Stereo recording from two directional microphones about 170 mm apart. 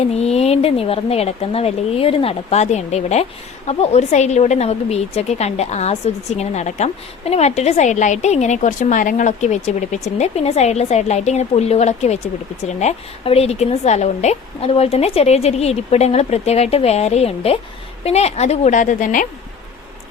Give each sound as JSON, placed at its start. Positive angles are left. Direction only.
{"t": 0.1, "sound": "a woman's voice", "side_deg": 40}